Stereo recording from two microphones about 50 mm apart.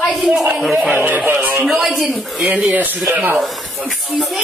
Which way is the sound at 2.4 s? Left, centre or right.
Right.